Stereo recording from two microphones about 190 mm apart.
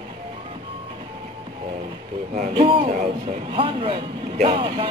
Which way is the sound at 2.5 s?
30° right (ahead or behind).